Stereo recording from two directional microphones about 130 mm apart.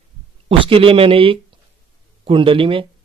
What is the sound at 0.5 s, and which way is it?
Speech, 45° right (ahead or behind).